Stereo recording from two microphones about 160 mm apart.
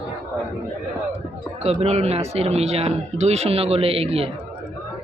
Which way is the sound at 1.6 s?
40° right (ahead or behind).